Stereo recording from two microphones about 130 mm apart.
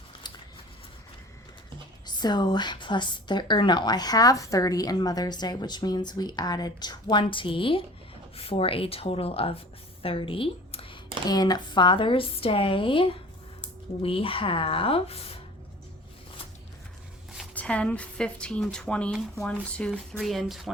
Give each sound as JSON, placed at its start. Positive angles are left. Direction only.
{"t": 2.0, "sound": "a woman's voice", "side_deg": 35}
{"t": 10.0, "sound": "a sound", "side_deg": 45}
{"t": 11.3, "sound": "speech", "side_deg": 30}
{"t": 17.5, "sound": "speech", "side_deg": 10}